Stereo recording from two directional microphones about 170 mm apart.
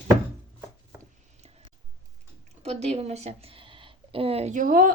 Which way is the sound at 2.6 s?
35° right (ahead or behind).